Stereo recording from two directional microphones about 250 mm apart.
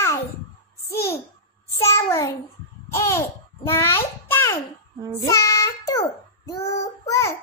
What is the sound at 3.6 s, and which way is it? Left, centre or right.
Speech, centre.